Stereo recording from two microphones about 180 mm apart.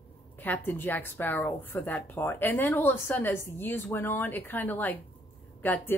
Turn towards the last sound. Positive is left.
turn(degrees=10)  # may be behind; listen again after turning